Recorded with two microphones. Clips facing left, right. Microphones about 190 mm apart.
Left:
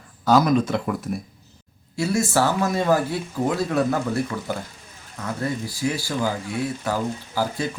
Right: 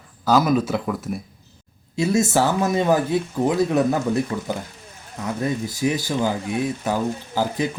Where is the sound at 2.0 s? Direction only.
20° right (ahead or behind).